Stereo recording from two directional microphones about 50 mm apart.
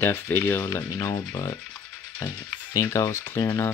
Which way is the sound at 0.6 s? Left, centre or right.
Left.